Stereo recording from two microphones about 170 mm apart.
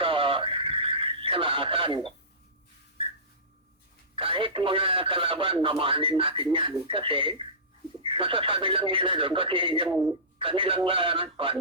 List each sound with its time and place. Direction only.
0.0 s radio: 30° right (ahead or behind)
4.1 s speech: 30° right (ahead or behind)